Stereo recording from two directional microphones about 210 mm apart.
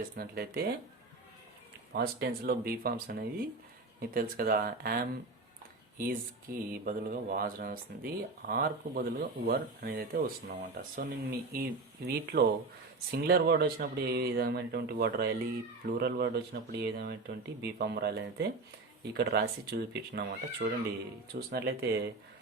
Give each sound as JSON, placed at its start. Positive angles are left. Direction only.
{"t": 0.2, "sound": "speech", "side_deg": -45}
{"t": 1.9, "sound": "speech", "side_deg": -50}